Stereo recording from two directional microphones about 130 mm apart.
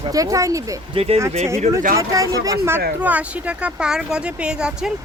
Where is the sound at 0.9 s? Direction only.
50° right (ahead or behind).